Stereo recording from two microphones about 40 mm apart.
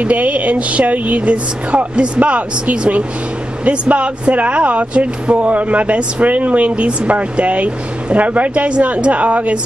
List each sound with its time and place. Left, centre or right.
0.0 s speech: right